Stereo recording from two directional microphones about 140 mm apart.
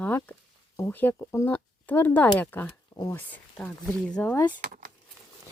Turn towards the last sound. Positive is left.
turn(degrees=-90)